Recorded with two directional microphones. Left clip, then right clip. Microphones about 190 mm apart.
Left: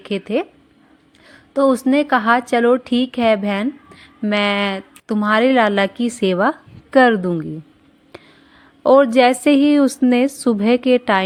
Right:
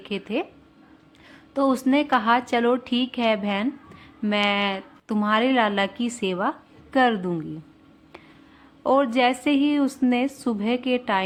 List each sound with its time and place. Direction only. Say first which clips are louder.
0.0 s speech: left 7 dB; 30° left (ahead or behind)
8.8 s speech: left 8 dB; 30° left (ahead or behind)